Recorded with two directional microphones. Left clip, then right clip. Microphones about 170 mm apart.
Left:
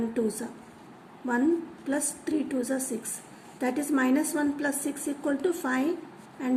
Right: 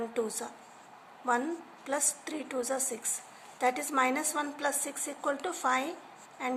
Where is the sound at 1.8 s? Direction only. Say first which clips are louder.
Left 1 dB; 35° right (ahead or behind).